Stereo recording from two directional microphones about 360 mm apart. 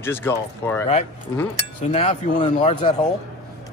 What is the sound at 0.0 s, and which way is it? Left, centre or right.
Speech, centre.